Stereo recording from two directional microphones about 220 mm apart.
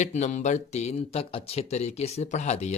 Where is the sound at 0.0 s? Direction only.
30° left (ahead or behind).